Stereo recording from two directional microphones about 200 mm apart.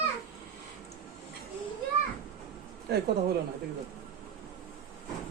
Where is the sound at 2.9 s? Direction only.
50° right (ahead or behind).